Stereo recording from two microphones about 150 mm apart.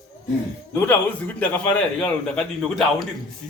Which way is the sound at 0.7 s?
10° left (ahead or behind).